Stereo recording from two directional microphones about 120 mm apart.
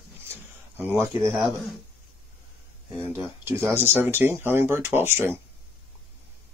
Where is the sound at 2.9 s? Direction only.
15° right (ahead or behind).